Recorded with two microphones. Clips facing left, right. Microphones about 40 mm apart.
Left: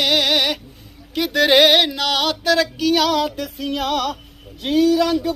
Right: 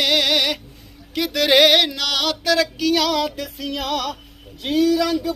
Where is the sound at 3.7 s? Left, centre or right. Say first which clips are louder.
Left 3 dB; left.